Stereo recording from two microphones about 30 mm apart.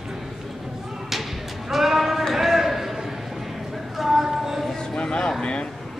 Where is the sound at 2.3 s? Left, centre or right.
Centre.